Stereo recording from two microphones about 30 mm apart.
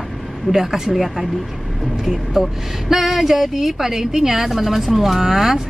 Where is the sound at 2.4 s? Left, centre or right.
Centre.